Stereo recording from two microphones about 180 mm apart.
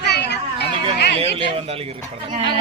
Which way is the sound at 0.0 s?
65° left (ahead or behind).